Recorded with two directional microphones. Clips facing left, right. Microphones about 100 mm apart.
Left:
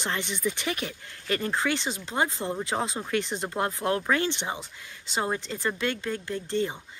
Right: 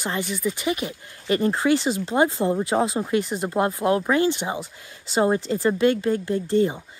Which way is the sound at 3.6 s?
20° right (ahead or behind).